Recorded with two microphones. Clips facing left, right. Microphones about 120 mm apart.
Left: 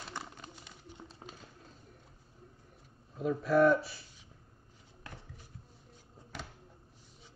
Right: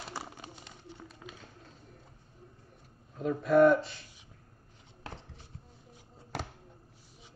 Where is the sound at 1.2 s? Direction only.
35° left (ahead or behind).